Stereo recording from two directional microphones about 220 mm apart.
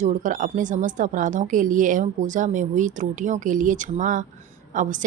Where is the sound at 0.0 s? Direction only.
35° right (ahead or behind).